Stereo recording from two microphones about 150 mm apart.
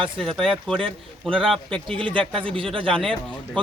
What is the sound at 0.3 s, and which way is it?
Speech, centre (ahead or behind).